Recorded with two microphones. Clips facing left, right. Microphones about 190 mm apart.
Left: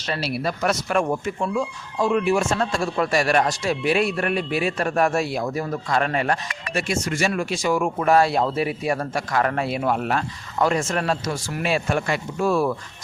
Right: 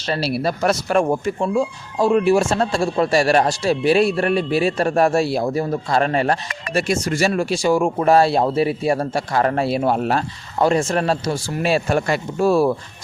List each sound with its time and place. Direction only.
0.1 s speech: 35° right (ahead or behind)